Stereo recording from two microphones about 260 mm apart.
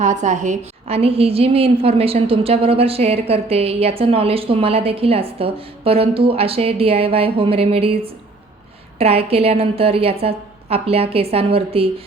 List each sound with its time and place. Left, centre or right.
0.0 s a woman's voice: right